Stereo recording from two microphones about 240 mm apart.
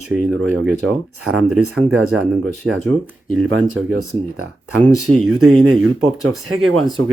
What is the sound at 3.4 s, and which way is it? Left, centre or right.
Speech, right.